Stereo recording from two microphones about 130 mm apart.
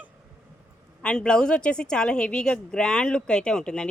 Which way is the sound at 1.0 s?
5° left (ahead or behind).